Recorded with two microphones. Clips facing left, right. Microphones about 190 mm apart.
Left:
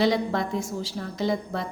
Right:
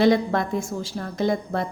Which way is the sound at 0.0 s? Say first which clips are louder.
Right 4 dB; 55° right (ahead or behind).